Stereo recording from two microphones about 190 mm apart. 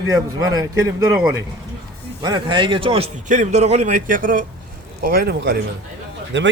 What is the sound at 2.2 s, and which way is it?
A man's voice, 20° right (ahead or behind).